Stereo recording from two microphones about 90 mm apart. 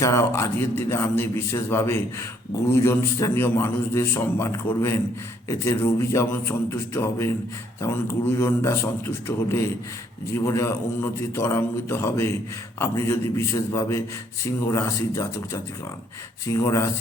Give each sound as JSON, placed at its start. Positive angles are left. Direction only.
{"t": 0.0, "sound": "a man's voice", "side_deg": 35}